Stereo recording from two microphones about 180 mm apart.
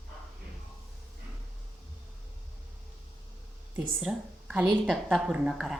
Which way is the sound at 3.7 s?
5° right (ahead or behind).